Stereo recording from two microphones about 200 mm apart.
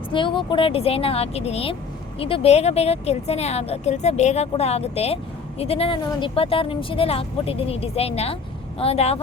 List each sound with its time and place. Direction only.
0.1 s speech: 25° left (ahead or behind)